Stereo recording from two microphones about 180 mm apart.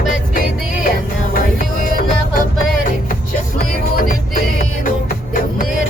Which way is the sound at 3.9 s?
50° left (ahead or behind).